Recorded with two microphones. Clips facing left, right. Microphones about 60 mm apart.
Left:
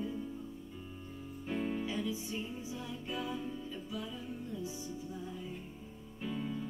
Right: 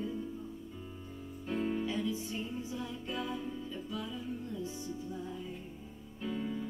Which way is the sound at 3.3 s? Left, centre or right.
Centre.